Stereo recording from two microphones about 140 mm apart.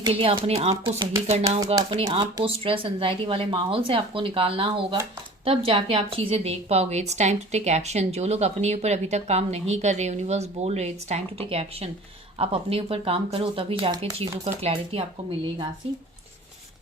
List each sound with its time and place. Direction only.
0.0 s a woman's voice: 40° right (ahead or behind)
0.9 s a woman's voice: 30° right (ahead or behind); by 15.0 s 45° right (ahead or behind)